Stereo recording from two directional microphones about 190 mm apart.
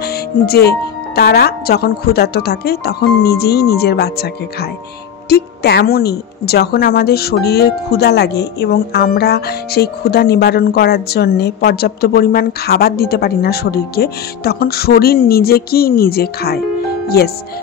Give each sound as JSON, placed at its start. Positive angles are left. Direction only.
{"t": 0.0, "sound": "a woman's voice", "side_deg": 55}